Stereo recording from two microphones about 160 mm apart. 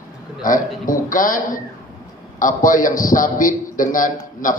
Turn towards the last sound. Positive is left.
turn(degrees=55)  # may be behind; listen again after turning